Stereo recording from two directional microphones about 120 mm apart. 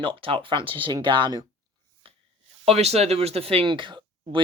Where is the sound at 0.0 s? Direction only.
45° right (ahead or behind).